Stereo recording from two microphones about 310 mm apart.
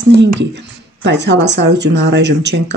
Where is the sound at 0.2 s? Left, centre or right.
Right.